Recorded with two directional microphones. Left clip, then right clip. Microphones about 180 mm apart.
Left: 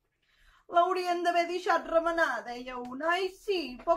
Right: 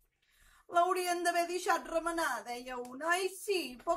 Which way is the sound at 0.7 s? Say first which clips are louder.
Left 4 dB; centre (ahead or behind).